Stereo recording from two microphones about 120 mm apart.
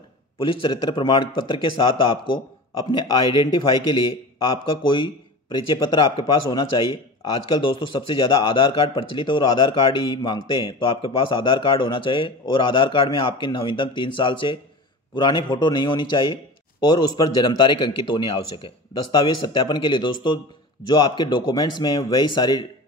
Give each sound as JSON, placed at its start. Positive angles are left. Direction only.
{"t": 0.4, "sound": "a man's voice", "side_deg": 45}
{"t": 5.5, "sound": "a man's voice", "side_deg": 40}
{"t": 7.7, "sound": "a man's voice", "side_deg": 45}
{"t": 10.0, "sound": "a man's voice", "side_deg": 35}